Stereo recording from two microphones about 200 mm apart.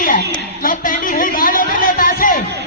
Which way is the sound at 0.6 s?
40° left (ahead or behind).